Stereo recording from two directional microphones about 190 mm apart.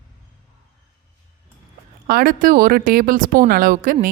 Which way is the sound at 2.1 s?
55° right (ahead or behind).